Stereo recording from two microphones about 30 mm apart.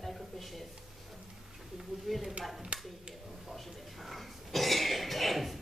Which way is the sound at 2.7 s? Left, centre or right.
Right.